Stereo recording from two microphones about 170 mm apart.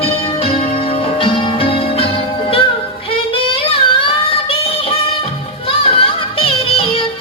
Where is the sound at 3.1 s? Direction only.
30° left (ahead or behind).